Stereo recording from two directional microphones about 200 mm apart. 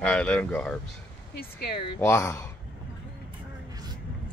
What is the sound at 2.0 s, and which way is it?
Speech, 10° left (ahead or behind).